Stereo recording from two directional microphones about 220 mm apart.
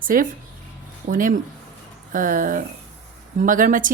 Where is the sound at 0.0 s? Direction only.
40° right (ahead or behind).